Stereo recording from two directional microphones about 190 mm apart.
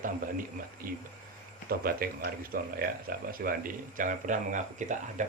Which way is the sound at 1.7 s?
50° right (ahead or behind).